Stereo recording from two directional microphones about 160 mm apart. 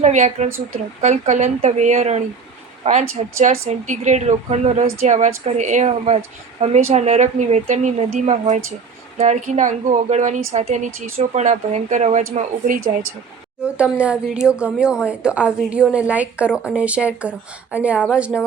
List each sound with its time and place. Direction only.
0.0 s a woman's voice: 45° right (ahead or behind)
13.7 s a woman's voice: 5° right (ahead or behind)